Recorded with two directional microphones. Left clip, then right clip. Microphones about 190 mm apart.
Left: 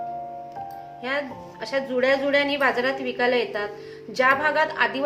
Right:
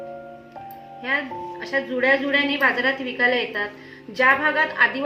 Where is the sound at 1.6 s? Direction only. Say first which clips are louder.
Right 1 dB; 20° left (ahead or behind).